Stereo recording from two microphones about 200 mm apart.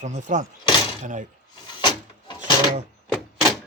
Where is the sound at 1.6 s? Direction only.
20° left (ahead or behind).